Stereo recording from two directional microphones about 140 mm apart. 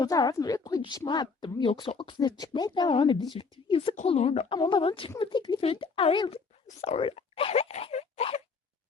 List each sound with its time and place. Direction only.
0.0 s a woman's voice: 30° left (ahead or behind)
6.8 s speech: 45° left (ahead or behind)